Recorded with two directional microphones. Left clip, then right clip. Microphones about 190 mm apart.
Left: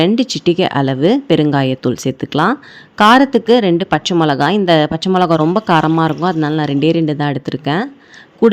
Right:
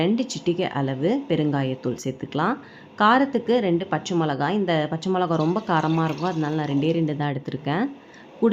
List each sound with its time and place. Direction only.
0.0 s a woman's voice: 40° left (ahead or behind)